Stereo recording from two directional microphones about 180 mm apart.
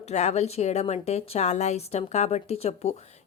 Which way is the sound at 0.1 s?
40° left (ahead or behind).